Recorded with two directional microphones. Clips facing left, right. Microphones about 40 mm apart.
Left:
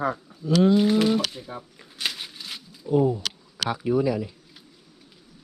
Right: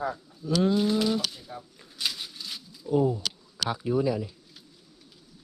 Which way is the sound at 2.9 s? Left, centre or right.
Left.